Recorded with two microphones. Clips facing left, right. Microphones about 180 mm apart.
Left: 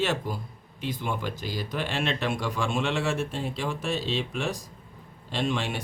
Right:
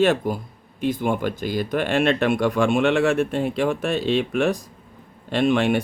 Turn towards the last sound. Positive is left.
turn(degrees=-60)  # may be behind; listen again after turning